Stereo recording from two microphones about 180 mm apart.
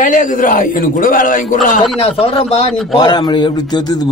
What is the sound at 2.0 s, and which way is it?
A man's voice, 30° left (ahead or behind).